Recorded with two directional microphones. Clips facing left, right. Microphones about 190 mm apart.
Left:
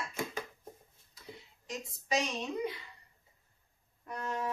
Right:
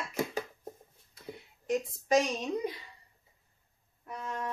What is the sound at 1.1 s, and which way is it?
A woman's voice, 55° right (ahead or behind).